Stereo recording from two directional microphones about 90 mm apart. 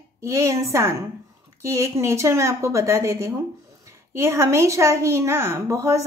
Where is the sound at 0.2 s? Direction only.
35° right (ahead or behind).